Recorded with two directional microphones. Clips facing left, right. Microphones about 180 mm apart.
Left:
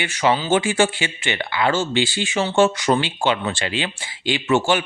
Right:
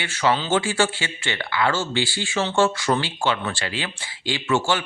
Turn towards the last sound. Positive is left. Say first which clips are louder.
# left 4 dB
turn(degrees=20)  # may be behind; listen again after turning